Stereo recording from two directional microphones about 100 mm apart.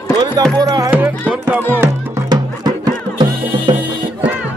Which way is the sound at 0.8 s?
20° right (ahead or behind).